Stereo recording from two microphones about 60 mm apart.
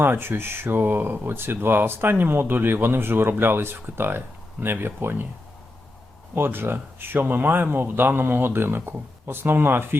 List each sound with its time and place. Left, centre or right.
0.0 s speech: right
6.3 s speech: right